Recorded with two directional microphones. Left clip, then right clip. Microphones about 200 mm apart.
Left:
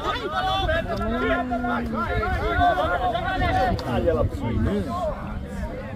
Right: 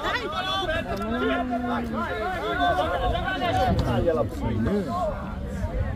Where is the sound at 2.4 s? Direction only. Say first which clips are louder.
Left 3 dB; 30° right (ahead or behind).